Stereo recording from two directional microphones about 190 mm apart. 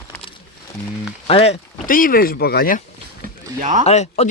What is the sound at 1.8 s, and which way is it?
Speech, 45° left (ahead or behind).